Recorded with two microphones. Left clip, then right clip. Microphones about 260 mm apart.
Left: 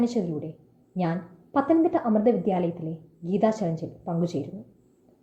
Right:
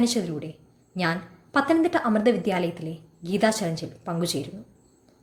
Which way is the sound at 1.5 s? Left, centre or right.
Centre.